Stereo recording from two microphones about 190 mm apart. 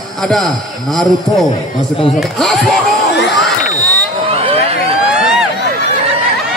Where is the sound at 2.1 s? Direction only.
Centre (ahead or behind).